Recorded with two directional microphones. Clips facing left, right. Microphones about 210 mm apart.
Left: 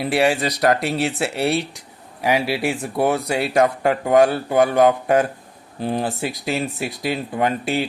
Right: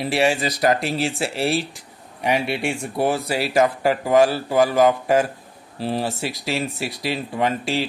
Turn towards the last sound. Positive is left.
turn(degrees=0)  # may be behind; listen again after turning